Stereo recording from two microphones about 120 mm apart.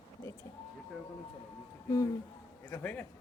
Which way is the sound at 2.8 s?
15° left (ahead or behind).